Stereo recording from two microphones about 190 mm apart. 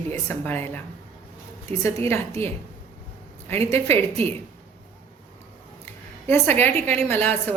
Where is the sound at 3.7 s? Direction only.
15° left (ahead or behind).